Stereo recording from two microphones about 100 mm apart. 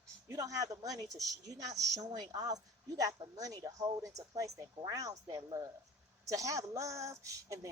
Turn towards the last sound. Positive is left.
turn(degrees=-35)  # may be behind; listen again after turning